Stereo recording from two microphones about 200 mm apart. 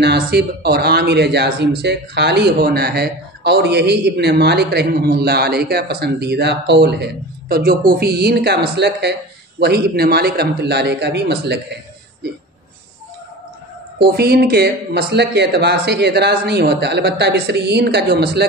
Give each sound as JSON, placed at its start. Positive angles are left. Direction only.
{"t": 0.0, "sound": "speech", "side_deg": -55}
{"t": 14.0, "sound": "speech", "side_deg": -50}